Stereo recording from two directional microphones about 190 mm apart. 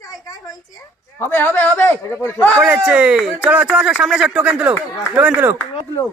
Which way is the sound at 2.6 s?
5° right (ahead or behind).